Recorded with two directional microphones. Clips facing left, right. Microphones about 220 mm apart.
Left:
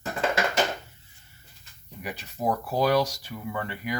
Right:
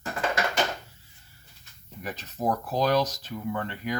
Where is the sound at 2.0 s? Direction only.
10° left (ahead or behind).